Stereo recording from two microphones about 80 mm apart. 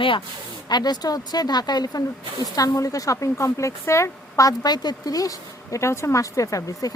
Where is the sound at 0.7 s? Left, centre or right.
Left.